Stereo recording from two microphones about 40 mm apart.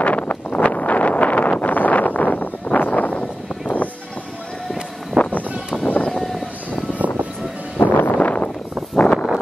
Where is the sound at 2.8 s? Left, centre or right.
Left.